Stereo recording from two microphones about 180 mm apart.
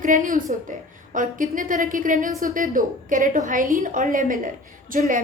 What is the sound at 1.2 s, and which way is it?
A woman's voice, 45° right (ahead or behind).